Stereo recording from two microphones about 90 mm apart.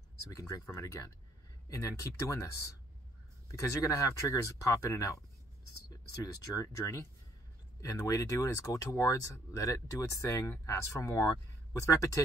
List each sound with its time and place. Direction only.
0.3 s speech: 35° left (ahead or behind)
1.7 s speech: 40° left (ahead or behind)